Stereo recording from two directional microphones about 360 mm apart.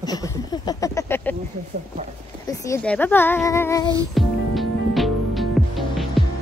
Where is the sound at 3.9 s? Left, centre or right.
Centre.